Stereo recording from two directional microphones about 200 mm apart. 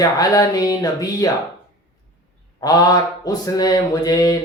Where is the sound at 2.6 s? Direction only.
20° left (ahead or behind).